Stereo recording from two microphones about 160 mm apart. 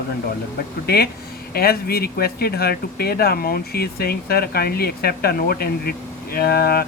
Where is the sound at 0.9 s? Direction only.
75° left (ahead or behind).